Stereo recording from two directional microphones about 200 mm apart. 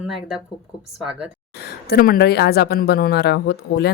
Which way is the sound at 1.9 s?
45° left (ahead or behind).